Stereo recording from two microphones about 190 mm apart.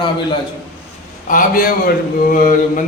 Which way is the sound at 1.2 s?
45° left (ahead or behind).